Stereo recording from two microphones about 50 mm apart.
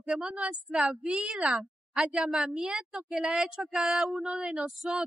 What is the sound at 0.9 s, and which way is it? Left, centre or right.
Speech, right.